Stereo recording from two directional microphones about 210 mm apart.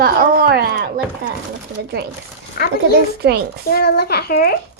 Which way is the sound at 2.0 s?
50° right (ahead or behind).